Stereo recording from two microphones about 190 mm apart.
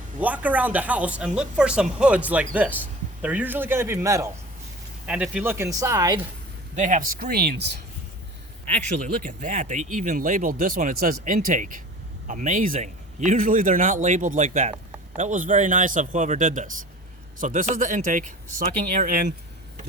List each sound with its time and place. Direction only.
0.2 s speech: 10° right (ahead or behind)
6.7 s a man's voice: 40° right (ahead or behind)
9.0 s a man's voice: 40° right (ahead or behind)